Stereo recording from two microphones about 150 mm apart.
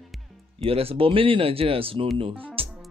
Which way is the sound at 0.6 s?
40° right (ahead or behind).